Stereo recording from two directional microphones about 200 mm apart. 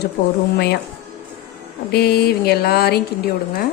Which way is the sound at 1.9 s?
55° left (ahead or behind).